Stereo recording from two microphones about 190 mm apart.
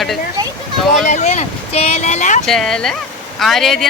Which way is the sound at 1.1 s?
35° left (ahead or behind).